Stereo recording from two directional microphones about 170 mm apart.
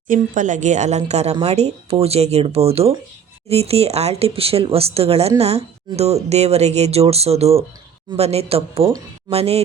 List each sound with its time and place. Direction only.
0.1 s a woman's voice: 50° right (ahead or behind)